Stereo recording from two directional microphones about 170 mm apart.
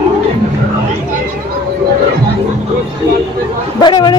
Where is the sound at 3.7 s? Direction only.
25° left (ahead or behind).